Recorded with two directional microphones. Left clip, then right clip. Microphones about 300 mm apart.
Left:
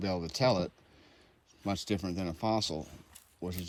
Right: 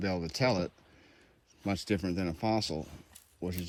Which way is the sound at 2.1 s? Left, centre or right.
Centre.